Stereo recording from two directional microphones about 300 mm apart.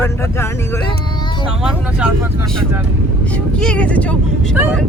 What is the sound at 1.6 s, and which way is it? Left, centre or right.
Speech, centre.